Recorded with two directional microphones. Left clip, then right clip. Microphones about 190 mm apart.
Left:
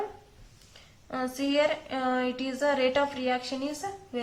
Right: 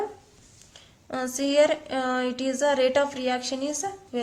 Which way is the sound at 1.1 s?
40° right (ahead or behind).